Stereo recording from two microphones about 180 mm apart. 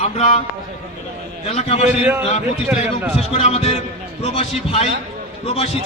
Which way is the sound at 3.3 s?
35° left (ahead or behind).